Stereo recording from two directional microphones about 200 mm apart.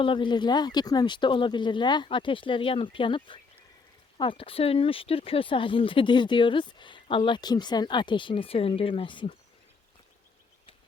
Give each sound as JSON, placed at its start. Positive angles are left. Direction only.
{"t": 0.0, "sound": "speech", "side_deg": 25}